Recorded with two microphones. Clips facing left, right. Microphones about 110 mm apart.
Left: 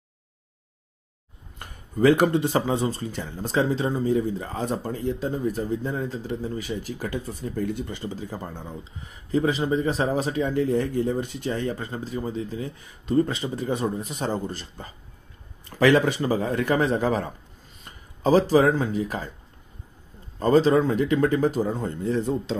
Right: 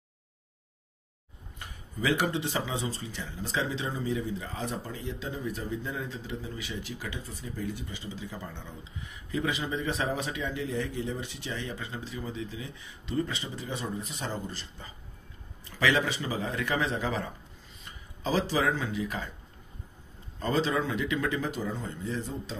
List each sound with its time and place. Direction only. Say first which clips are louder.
1.6 s speech: left 12 dB; 50° left (ahead or behind)
20.3 s speech: left 10 dB; 45° left (ahead or behind); by 22.6 s 60° left (ahead or behind)